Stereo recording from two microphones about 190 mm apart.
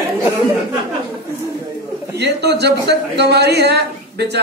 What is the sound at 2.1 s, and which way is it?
A man's voice, 60° right (ahead or behind).